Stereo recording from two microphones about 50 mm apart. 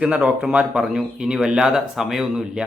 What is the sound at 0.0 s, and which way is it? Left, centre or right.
Speech, right.